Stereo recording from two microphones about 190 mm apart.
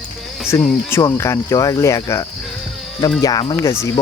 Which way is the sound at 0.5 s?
10° left (ahead or behind).